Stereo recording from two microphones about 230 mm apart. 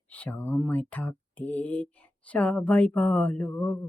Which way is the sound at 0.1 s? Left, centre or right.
Centre.